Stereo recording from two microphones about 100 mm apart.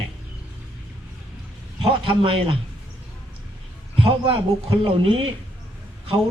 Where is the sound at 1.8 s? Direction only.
65° right (ahead or behind).